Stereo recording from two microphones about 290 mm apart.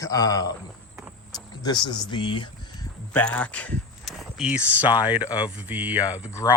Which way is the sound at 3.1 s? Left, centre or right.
Centre.